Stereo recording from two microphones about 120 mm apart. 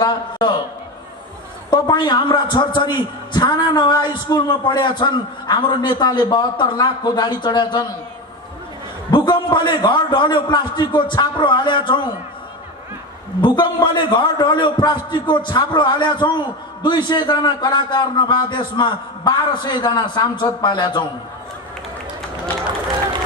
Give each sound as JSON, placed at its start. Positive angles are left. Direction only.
{"t": 0.0, "sound": "a sound", "side_deg": 35}
{"t": 1.7, "sound": "a man's voice", "side_deg": 40}
{"t": 9.1, "sound": "a man's voice", "side_deg": 35}
{"t": 13.4, "sound": "a man's voice", "side_deg": 40}